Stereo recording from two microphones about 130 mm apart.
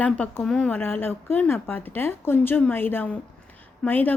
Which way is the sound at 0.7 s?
15° left (ahead or behind).